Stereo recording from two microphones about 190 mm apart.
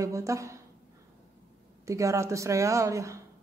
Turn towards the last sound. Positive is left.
turn(degrees=-15)  # may be behind; listen again after turning